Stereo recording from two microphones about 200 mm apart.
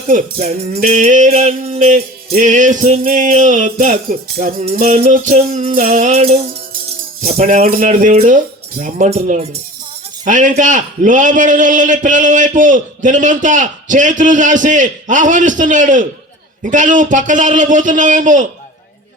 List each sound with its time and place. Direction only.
0.1 s music: 35° right (ahead or behind)